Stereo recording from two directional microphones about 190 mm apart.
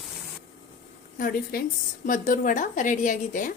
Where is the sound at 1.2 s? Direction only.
45° left (ahead or behind).